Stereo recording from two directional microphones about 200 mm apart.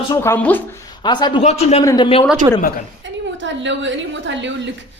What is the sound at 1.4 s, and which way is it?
Speech, 35° left (ahead or behind).